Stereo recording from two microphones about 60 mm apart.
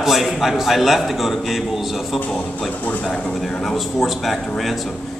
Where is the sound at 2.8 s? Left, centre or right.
Left.